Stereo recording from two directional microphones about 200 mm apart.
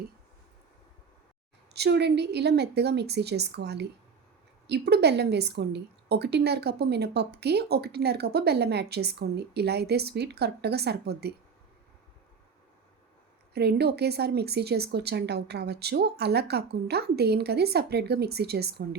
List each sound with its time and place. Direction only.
1.7 s a woman's voice: 55° right (ahead or behind)
13.5 s speech: 55° right (ahead or behind)